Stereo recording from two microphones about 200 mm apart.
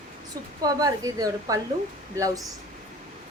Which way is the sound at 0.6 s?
20° right (ahead or behind).